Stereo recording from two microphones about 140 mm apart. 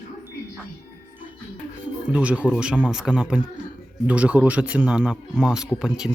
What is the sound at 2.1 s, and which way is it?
Speech, 10° right (ahead or behind).